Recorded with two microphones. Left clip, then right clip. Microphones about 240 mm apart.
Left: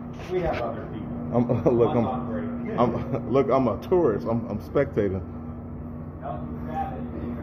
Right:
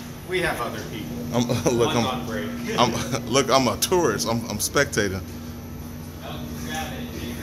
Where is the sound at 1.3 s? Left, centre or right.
Centre.